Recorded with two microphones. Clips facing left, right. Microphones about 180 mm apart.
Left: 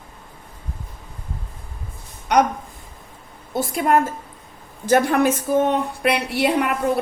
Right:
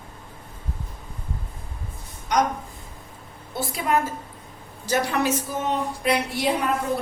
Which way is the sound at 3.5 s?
50° left (ahead or behind).